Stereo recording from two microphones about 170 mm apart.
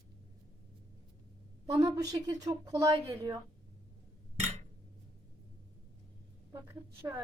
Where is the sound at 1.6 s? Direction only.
20° right (ahead or behind).